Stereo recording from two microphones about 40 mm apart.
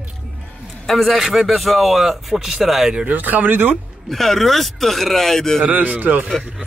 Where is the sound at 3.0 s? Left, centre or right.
Right.